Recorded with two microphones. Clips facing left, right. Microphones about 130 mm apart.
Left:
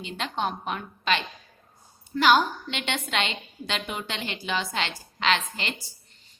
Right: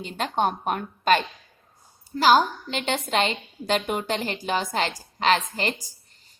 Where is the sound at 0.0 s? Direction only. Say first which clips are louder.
Right 5 dB; 45° right (ahead or behind).